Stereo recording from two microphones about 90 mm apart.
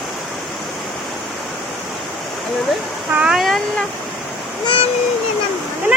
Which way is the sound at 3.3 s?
Centre (ahead or behind).